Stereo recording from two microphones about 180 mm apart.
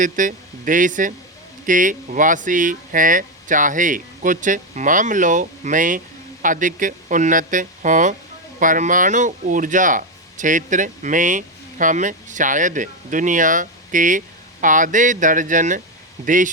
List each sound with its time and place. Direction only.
0.0 s speech: 45° right (ahead or behind)